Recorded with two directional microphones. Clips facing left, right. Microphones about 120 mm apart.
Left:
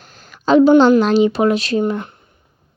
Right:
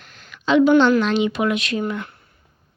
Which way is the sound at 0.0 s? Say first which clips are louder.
Left 6 dB; 35° left (ahead or behind).